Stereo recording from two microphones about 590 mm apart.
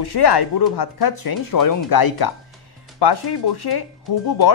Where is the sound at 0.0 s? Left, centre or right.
Left.